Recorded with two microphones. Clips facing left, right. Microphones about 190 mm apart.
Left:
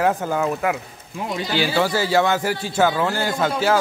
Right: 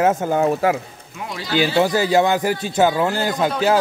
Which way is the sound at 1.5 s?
20° right (ahead or behind).